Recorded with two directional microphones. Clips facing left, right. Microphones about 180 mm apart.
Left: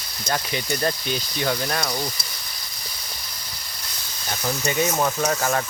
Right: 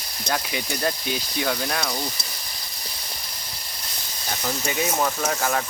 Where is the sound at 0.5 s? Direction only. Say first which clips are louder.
Left 2 dB; 5° right (ahead or behind).